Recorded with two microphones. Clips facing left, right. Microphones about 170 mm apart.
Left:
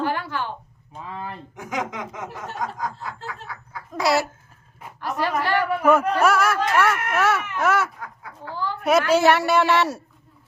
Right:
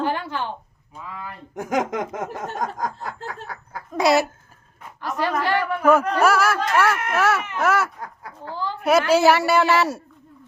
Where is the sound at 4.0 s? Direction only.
20° right (ahead or behind).